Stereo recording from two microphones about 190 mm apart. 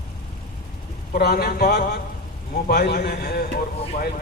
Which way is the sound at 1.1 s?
55° left (ahead or behind).